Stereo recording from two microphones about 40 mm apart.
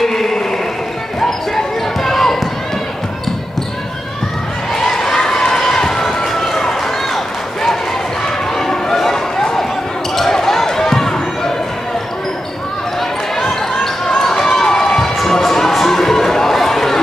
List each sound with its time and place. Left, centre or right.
0.0 s chant: centre
2.0 s basketball bounce: centre
4.7 s run: centre
8.5 s a sound: centre
10.1 s basketball bounce: centre
14.0 s a sound: centre